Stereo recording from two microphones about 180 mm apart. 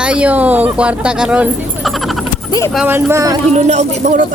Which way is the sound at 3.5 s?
40° right (ahead or behind).